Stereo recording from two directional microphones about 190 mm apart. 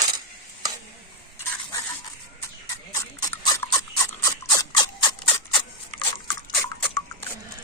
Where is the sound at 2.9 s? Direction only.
20° left (ahead or behind).